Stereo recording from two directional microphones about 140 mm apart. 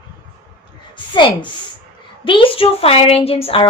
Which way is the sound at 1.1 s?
35° left (ahead or behind).